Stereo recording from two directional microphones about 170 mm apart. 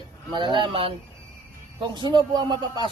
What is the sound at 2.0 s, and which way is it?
Speech, 25° right (ahead or behind).